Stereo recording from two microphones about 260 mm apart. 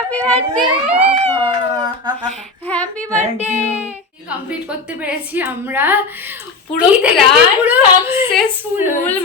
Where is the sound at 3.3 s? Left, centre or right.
Left.